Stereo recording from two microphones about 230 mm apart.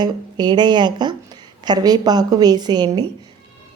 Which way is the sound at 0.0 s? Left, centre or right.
Centre.